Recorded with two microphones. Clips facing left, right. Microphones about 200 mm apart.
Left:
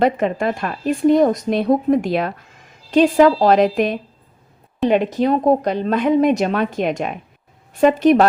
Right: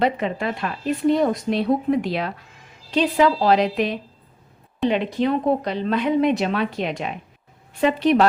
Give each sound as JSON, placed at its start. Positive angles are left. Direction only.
{"t": 0.0, "sound": "speech", "side_deg": 45}